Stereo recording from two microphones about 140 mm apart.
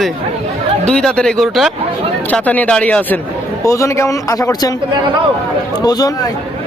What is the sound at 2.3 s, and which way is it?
Speech, 10° left (ahead or behind).